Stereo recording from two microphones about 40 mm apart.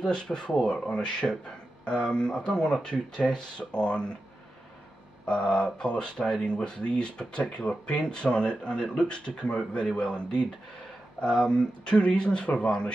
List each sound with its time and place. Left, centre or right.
0.0 s speech: left
1.2 s speech: centre
1.9 s speech: left
5.2 s speech: left
11.4 s speech: left